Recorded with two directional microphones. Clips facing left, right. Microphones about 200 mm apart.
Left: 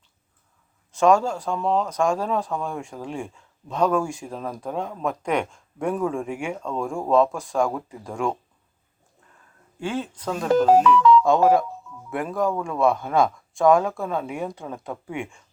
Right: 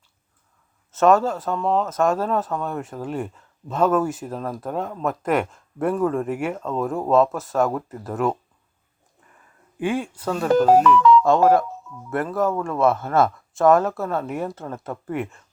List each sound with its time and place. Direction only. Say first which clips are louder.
0.9 s speech: right 1 dB; 5° right (ahead or behind)
9.7 s speech: right 4 dB; 15° right (ahead or behind)
10.8 s speech: right 1 dB; 55° right (ahead or behind)
11.2 s speech: right 1 dB; centre (ahead or behind)